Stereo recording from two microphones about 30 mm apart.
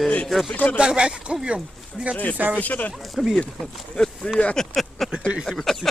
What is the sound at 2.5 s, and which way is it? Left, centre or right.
Speech, left.